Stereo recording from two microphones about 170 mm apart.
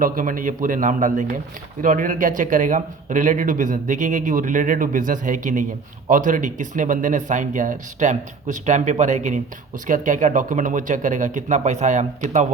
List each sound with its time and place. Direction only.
0.0 s speech: 55° right (ahead or behind)